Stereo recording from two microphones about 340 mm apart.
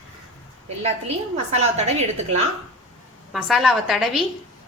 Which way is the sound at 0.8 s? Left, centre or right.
Centre.